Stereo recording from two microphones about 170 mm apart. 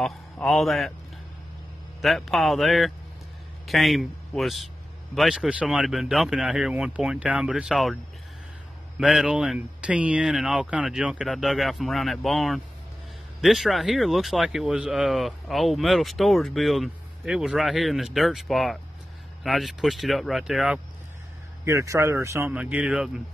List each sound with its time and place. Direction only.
0.0 s a man's voice: centre (ahead or behind)
2.0 s speech: centre (ahead or behind)
21.6 s speech: 20° right (ahead or behind)